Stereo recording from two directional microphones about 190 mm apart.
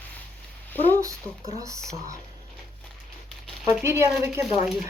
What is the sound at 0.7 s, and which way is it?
Speech, 10° left (ahead or behind).